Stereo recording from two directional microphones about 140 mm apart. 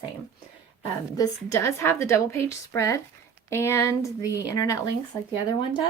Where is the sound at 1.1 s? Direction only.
25° left (ahead or behind).